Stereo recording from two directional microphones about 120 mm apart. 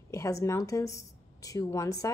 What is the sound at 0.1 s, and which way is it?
Speech, 25° left (ahead or behind).